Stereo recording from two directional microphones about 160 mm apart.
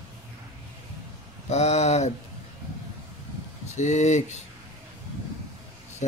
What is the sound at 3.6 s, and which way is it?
Speech, 45° left (ahead or behind).